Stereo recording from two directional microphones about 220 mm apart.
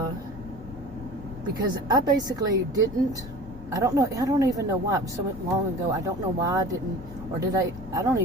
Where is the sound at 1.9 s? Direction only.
15° right (ahead or behind).